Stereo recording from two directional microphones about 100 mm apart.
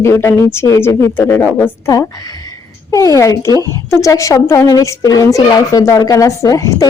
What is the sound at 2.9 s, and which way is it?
A woman's voice, 35° left (ahead or behind).